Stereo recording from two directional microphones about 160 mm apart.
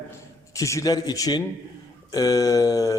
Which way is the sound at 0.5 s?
20° left (ahead or behind).